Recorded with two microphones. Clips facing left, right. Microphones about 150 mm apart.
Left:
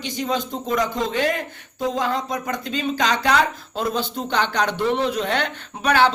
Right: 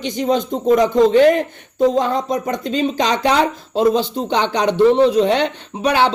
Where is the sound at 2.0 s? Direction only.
45° right (ahead or behind).